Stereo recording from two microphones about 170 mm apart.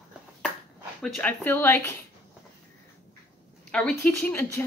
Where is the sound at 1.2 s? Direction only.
15° left (ahead or behind).